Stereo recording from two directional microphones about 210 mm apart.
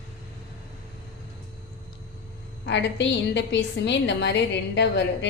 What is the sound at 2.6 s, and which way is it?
A woman's voice, 55° left (ahead or behind).